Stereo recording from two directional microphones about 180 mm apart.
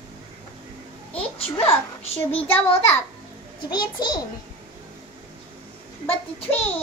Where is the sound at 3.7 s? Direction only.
25° left (ahead or behind).